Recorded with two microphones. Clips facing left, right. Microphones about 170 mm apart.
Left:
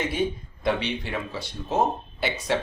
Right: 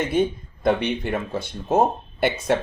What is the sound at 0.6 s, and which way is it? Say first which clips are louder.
Speech: right 5 dB; 50° right (ahead or behind).